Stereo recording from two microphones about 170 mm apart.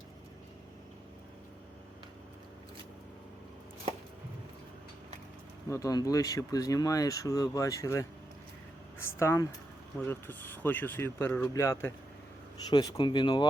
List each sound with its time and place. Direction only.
5.6 s speech: 20° left (ahead or behind)
9.0 s speech: 15° left (ahead or behind)